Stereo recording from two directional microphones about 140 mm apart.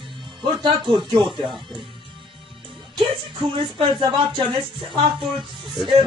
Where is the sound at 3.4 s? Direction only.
35° right (ahead or behind).